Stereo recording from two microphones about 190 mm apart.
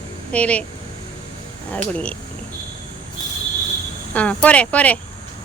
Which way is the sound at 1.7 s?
5° left (ahead or behind).